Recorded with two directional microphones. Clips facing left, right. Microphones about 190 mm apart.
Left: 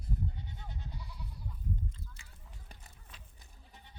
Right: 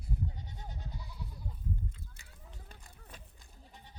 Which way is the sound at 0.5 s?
40° right (ahead or behind).